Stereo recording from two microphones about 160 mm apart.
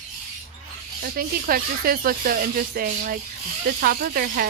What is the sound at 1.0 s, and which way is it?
Speech, 65° right (ahead or behind).